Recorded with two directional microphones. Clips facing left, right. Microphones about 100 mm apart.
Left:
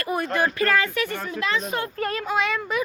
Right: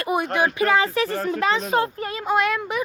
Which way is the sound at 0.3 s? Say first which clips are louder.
Right 2 dB; 15° right (ahead or behind).